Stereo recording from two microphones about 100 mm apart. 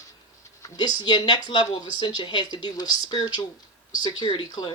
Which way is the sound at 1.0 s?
50° left (ahead or behind).